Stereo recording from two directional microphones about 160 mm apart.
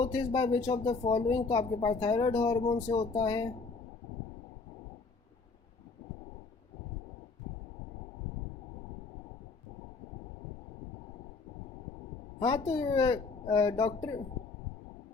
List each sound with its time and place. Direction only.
0.0 s speech: 20° left (ahead or behind)
12.4 s speech: 30° left (ahead or behind)